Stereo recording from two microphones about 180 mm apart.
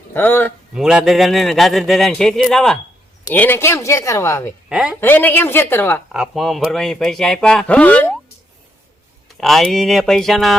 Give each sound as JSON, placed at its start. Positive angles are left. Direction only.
{"t": 0.1, "sound": "speech", "side_deg": 10}
{"t": 0.7, "sound": "speech", "side_deg": -5}
{"t": 4.7, "sound": "speech", "side_deg": -5}
{"t": 4.9, "sound": "speech", "side_deg": 10}
{"t": 6.1, "sound": "speech", "side_deg": 0}
{"t": 9.4, "sound": "speech", "side_deg": 0}